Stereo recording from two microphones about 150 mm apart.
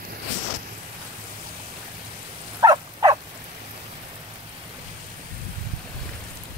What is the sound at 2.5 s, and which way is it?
Wild animals, 25° right (ahead or behind).